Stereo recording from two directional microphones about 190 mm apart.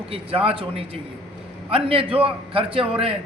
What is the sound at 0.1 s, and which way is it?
A man's voice, 30° right (ahead or behind).